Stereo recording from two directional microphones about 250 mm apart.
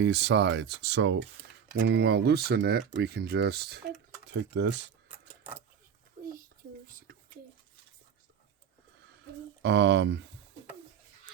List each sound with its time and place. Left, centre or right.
0.0 s speech: right
5.4 s keys jangling: centre
6.2 s a sound: right
9.6 s speech: right